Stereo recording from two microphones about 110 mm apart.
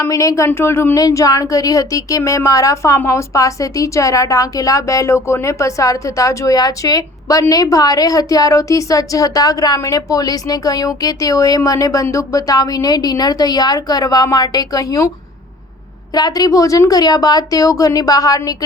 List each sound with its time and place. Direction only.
0.0 s a woman's voice: 30° left (ahead or behind)
16.1 s a woman's voice: 35° left (ahead or behind)